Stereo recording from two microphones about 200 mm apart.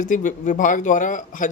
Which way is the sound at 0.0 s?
40° left (ahead or behind).